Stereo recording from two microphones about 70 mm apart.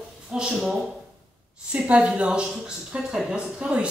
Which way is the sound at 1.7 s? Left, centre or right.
Centre.